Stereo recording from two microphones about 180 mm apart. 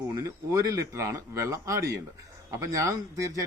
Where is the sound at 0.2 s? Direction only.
15° right (ahead or behind).